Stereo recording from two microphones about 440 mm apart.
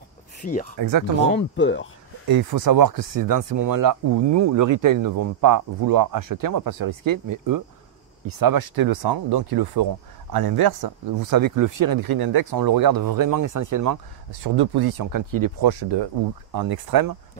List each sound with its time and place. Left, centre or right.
0.4 s speech: centre
0.7 s speech: right
1.3 s speech: left
2.2 s speech: right
14.4 s speech: right
15.8 s speech: right
16.5 s speech: right